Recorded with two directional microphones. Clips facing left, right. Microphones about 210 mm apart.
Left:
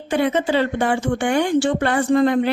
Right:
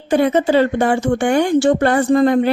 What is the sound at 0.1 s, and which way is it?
Speech, 40° right (ahead or behind).